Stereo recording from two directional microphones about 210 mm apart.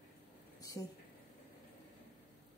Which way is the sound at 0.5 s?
15° left (ahead or behind).